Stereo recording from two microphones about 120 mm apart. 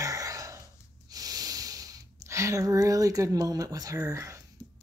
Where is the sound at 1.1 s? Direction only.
30° right (ahead or behind).